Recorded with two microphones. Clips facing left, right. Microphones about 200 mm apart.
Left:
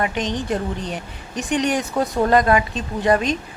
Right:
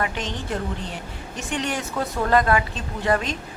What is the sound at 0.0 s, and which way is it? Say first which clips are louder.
A woman's voice: left 5 dB; 15° left (ahead or behind).